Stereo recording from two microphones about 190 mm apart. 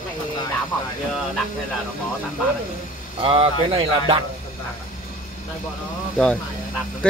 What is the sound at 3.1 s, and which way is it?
Speech, 30° right (ahead or behind).